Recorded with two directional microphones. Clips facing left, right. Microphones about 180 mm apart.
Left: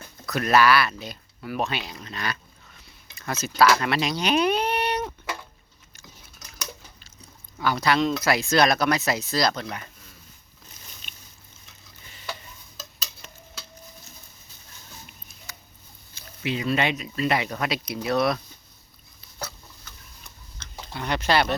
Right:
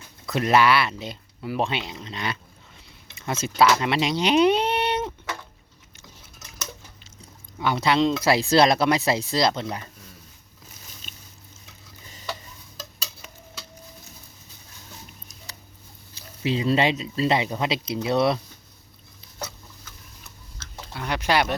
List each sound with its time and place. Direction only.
0.3 s speech: 25° right (ahead or behind)
7.6 s speech: 25° right (ahead or behind)
16.4 s speech: 35° right (ahead or behind)
19.8 s tick-tock: 5° right (ahead or behind)
20.8 s speech: 5° right (ahead or behind)